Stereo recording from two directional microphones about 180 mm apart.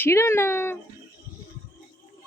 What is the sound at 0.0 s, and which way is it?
Speech, 15° left (ahead or behind).